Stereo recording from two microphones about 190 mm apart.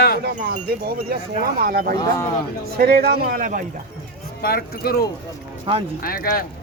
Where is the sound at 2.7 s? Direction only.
55° right (ahead or behind).